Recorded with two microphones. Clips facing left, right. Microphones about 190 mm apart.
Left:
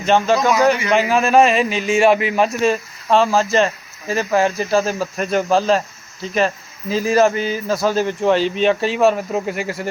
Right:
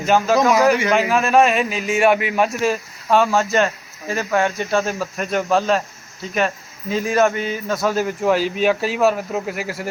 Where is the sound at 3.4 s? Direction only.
Centre (ahead or behind).